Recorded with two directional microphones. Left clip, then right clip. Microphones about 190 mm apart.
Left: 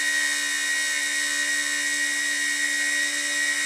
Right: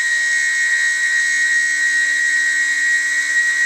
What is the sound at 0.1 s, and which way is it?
Dental drill, centre (ahead or behind).